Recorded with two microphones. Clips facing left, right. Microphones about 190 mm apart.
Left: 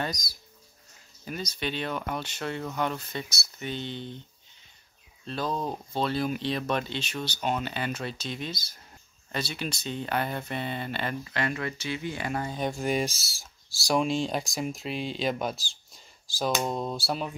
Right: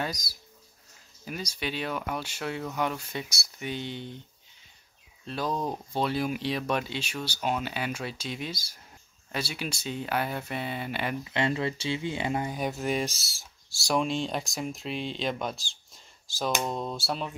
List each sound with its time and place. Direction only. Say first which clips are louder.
0.0 s speech: left 1 dB; 5° right (ahead or behind)
5.2 s speech: even; 10° right (ahead or behind)
11.3 s speech: right 5 dB; 25° right (ahead or behind)
12.5 s speech: left 1 dB; 5° right (ahead or behind)